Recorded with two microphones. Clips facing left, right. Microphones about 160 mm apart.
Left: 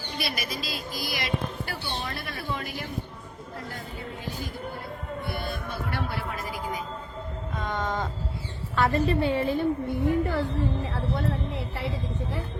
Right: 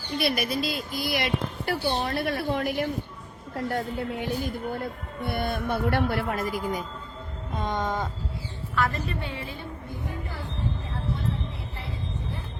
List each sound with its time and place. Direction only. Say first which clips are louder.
0.2 s a woman's voice: right 7 dB; 55° right (ahead or behind)
7.6 s speech: right 2 dB; 15° right (ahead or behind)
8.7 s a woman's voice: left 5 dB; 30° left (ahead or behind)
10.1 s a woman's voice: left 14 dB; 80° left
10.8 s a sound: left 3 dB; 80° left